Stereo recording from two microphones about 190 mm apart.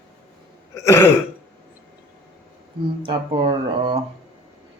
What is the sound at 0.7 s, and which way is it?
Throat clearing, 15° left (ahead or behind).